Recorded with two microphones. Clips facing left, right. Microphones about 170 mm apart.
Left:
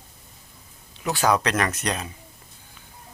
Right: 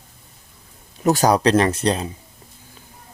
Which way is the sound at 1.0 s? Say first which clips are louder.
Right 6 dB; 40° right (ahead or behind).